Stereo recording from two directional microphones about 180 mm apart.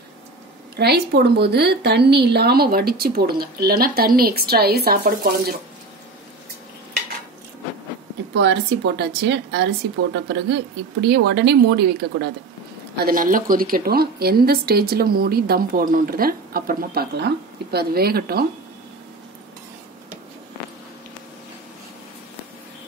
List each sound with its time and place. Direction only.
0.7 s a woman's voice: 65° right (ahead or behind)
8.4 s a woman's voice: 75° right (ahead or behind)
13.0 s a woman's voice: 50° right (ahead or behind)